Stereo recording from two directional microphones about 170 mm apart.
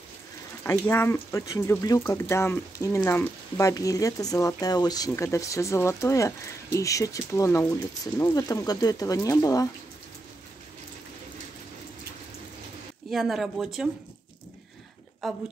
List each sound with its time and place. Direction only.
0.7 s speech: 15° left (ahead or behind)
13.1 s speech: centre (ahead or behind)
15.2 s speech: centre (ahead or behind)